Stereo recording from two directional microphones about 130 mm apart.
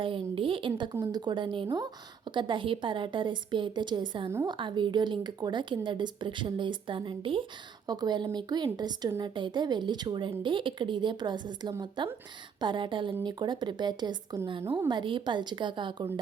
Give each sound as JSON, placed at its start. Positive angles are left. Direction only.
{"t": 0.0, "sound": "a woman's voice", "side_deg": -40}